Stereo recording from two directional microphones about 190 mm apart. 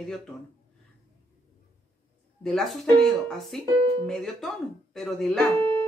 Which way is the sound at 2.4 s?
Centre (ahead or behind).